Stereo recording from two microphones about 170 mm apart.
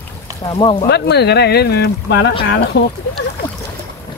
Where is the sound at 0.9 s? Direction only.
75° left (ahead or behind).